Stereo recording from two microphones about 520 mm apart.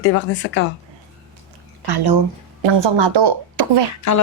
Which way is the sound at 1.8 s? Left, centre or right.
Right.